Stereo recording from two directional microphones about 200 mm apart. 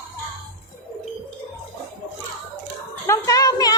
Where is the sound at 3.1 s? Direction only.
15° left (ahead or behind).